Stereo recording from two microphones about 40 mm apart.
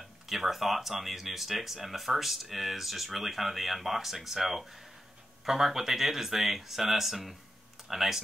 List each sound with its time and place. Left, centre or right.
0.0 s speech: centre